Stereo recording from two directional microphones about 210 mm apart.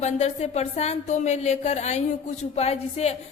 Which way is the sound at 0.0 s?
30° left (ahead or behind).